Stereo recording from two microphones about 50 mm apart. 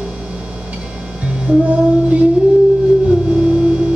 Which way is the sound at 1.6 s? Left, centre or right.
Right.